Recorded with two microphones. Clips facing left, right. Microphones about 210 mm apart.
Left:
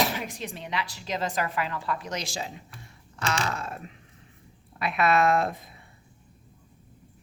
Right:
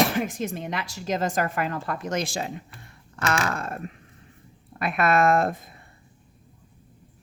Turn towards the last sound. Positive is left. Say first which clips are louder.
# right 3 dB
turn(degrees=-50)  # may be behind; listen again after turning